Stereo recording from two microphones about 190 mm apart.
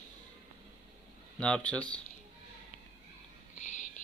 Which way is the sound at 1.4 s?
5° left (ahead or behind).